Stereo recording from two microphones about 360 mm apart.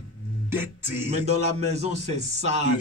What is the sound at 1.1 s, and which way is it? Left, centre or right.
Speech, centre.